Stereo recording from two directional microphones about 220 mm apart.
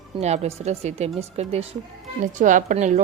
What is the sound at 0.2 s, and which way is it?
A woman's voice, 30° right (ahead or behind).